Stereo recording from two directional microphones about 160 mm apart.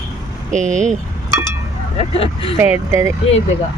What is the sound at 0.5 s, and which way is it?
Speech, 50° right (ahead or behind).